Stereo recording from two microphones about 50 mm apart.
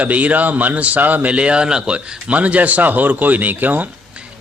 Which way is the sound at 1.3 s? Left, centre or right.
Right.